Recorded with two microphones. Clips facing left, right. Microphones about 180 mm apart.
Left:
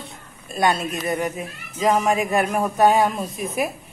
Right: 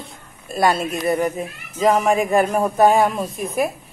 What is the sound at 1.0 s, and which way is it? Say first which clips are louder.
A man's voice: right 6 dB; 35° right (ahead or behind).